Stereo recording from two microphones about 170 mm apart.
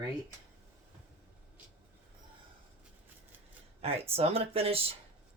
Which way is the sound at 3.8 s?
35° right (ahead or behind).